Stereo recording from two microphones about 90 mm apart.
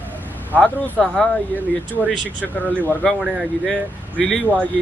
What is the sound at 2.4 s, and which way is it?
Speech, 15° left (ahead or behind).